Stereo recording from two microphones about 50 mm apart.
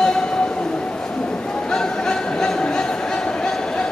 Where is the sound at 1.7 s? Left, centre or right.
Centre.